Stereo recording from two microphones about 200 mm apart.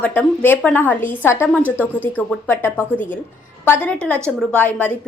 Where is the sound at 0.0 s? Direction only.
10° left (ahead or behind).